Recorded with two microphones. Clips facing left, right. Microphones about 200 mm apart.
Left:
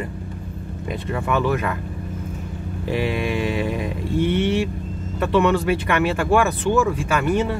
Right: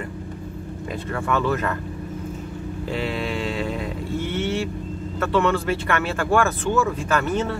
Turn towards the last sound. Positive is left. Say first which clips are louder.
# left 2 dB
turn(degrees=10)  # may be behind; listen again after turning